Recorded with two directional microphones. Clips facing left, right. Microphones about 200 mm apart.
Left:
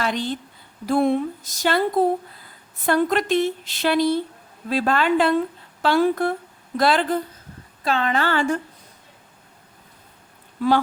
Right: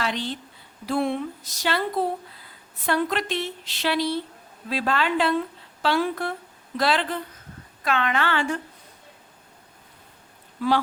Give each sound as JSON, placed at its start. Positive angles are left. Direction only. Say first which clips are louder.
{"t": 0.0, "sound": "a woman's voice", "louder": "left 4 dB", "side_deg": 45}
{"t": 7.9, "sound": "a woman's voice", "louder": "left 3 dB", "side_deg": 35}